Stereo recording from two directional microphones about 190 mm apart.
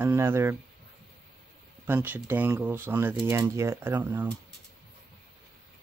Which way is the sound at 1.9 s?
10° right (ahead or behind).